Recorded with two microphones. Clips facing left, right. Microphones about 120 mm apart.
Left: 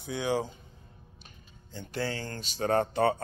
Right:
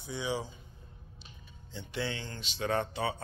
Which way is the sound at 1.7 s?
45° left (ahead or behind).